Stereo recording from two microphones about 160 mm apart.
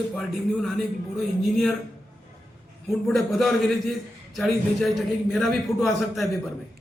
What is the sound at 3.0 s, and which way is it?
A man's voice, centre (ahead or behind).